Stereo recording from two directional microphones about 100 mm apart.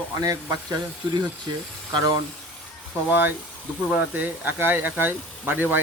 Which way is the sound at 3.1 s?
20° right (ahead or behind).